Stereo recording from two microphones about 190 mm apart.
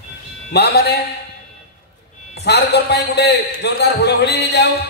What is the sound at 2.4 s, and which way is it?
A man's voice, 60° left (ahead or behind).